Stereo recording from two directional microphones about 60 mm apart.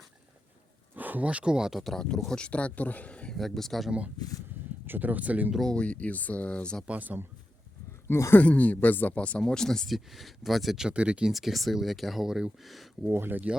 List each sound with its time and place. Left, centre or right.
0.9 s speech: right; by 1.7 s centre
1.7 s speech: centre
2.3 s speech: centre
3.3 s speech: centre
4.9 s speech: right
5.7 s speech: centre
6.8 s speech: right
8.0 s speech: left
8.4 s speech: left
9.4 s speech: centre
9.9 s speech: centre
10.8 s speech: centre
11.3 s speech: centre
13.1 s speech: right